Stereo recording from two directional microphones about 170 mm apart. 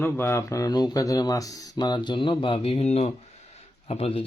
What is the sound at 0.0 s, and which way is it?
Speech, 15° left (ahead or behind).